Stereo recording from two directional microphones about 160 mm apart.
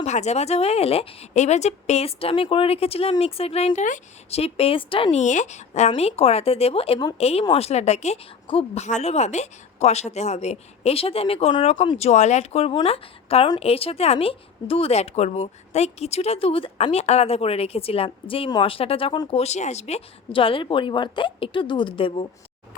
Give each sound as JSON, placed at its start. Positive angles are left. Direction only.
{"t": 0.0, "sound": "speech", "side_deg": 45}
{"t": 5.2, "sound": "speech", "side_deg": 50}
{"t": 19.4, "sound": "speech", "side_deg": 45}
{"t": 22.7, "sound": "a sound", "side_deg": 55}